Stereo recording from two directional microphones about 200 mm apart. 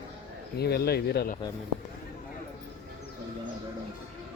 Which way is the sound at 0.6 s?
55° left (ahead or behind).